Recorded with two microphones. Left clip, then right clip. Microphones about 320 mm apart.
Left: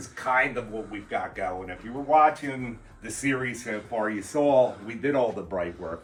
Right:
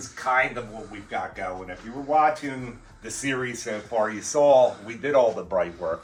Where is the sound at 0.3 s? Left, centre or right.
Centre.